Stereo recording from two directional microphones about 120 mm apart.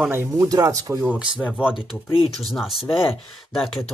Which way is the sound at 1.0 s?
10° right (ahead or behind).